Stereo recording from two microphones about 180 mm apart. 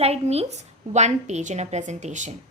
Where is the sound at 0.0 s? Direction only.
35° right (ahead or behind).